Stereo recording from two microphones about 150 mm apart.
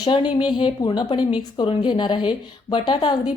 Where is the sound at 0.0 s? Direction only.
30° left (ahead or behind).